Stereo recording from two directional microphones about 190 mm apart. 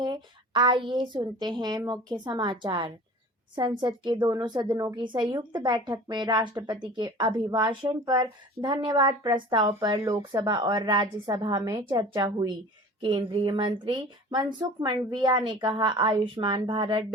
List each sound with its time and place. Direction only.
0.0 s a woman's voice: 25° right (ahead or behind)